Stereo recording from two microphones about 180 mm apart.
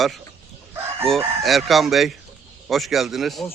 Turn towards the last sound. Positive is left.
turn(degrees=0)  # may be behind; listen again after turning